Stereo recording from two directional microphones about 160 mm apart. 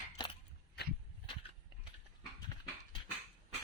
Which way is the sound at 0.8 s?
90° left.